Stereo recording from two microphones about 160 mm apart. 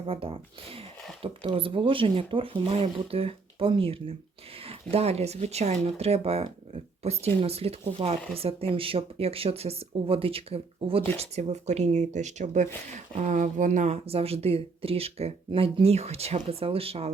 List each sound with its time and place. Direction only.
0.0 s speech: 35° right (ahead or behind)